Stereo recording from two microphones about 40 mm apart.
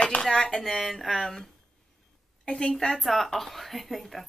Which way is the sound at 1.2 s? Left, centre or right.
Centre.